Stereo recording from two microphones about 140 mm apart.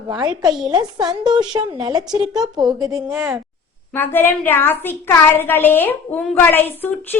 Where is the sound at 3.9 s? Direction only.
15° left (ahead or behind).